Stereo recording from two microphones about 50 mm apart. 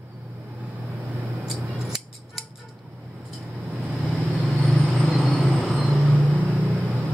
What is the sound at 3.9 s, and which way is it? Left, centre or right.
Vehicle, centre.